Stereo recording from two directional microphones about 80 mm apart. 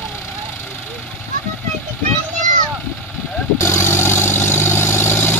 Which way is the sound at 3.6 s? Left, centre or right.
Left.